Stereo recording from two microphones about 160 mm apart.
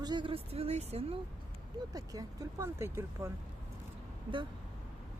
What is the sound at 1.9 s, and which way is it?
Speech, 20° right (ahead or behind).